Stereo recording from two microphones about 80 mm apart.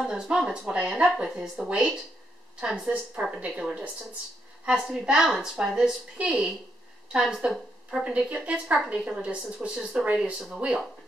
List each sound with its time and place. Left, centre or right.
0.0 s a woman's voice: centre
8.0 s a woman's voice: centre